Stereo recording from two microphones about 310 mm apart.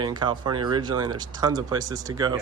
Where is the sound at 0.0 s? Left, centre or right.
Centre.